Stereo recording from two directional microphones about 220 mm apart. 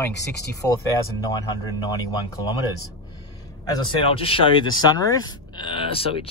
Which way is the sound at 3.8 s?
25° left (ahead or behind).